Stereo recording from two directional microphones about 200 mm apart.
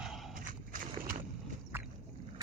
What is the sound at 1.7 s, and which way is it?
Vehicle, 10° right (ahead or behind).